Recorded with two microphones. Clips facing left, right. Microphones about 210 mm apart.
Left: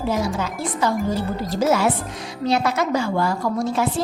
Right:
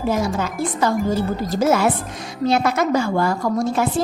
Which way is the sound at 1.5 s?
50° right (ahead or behind).